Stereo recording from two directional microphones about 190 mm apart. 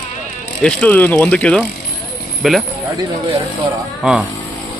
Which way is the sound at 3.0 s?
25° right (ahead or behind).